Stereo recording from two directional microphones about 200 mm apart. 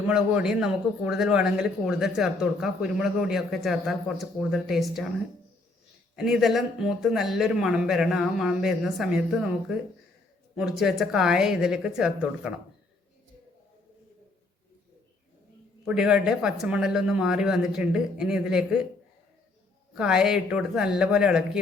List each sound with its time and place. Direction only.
0.1 s a man's voice: 5° right (ahead or behind)
6.1 s a man's voice: centre (ahead or behind)
16.0 s a man's voice: 5° right (ahead or behind)
20.0 s a man's voice: 5° right (ahead or behind)